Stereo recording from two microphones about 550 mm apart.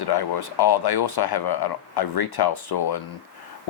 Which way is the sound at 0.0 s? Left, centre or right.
Left.